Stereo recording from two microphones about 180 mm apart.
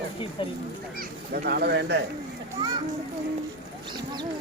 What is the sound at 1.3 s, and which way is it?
Speech, 60° right (ahead or behind).